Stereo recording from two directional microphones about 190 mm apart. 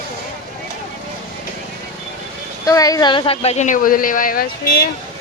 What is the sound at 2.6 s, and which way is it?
Speech, 20° left (ahead or behind).